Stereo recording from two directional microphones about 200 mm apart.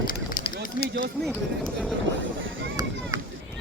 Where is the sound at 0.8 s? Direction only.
45° left (ahead or behind).